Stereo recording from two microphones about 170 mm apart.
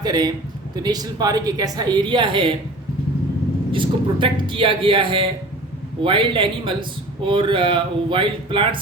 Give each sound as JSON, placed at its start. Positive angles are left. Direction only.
{"t": 0.0, "sound": "a man's voice", "side_deg": -25}
{"t": 3.7, "sound": "a man's voice", "side_deg": -30}